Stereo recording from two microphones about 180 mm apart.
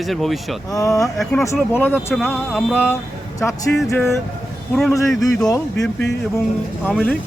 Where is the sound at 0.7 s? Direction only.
20° left (ahead or behind).